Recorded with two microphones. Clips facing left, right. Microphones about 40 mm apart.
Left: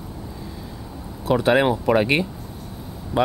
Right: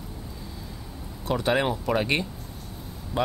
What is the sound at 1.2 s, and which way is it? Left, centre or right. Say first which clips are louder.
Speech: left 7 dB; centre.